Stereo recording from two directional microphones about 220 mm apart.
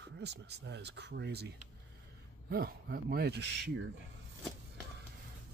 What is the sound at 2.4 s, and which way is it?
Speech, 45° right (ahead or behind).